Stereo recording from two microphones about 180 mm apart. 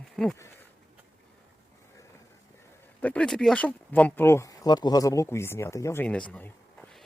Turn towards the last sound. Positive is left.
turn(degrees=10)  # may be behind; listen again after turning